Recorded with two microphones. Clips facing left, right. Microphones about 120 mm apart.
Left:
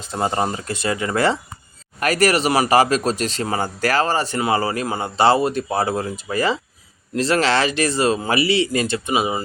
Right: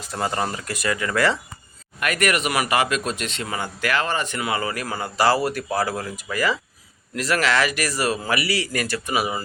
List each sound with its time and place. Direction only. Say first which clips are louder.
0.0 s speech: left 4 dB; 25° left (ahead or behind)